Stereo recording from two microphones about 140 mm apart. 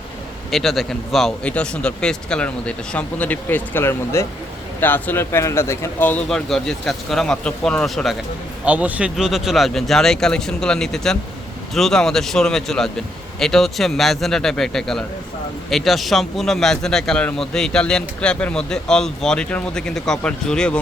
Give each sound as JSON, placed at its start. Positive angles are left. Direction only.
{"t": 0.5, "sound": "a man's voice", "side_deg": 0}
{"t": 8.6, "sound": "a man's voice", "side_deg": -10}